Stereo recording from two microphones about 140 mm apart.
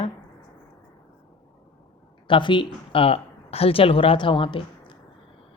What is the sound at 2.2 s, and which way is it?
Speech, 35° left (ahead or behind).